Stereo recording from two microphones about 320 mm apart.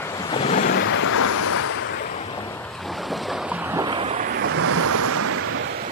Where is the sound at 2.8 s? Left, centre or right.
Centre; by 5.4 s right.